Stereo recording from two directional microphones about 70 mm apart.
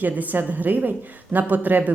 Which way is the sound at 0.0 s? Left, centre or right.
Right.